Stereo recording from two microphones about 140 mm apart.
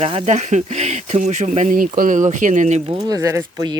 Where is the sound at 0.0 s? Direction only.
45° right (ahead or behind).